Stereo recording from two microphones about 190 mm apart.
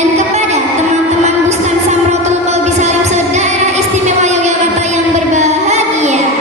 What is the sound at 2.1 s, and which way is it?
Music, 35° right (ahead or behind).